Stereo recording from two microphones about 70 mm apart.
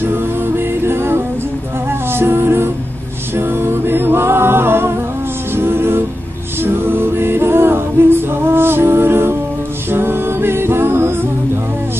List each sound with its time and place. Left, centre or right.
0.8 s music: right
3.3 s a capella: right
5.6 s music: right